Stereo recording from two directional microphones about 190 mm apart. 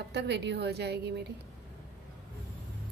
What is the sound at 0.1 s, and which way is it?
Speech, 60° right (ahead or behind).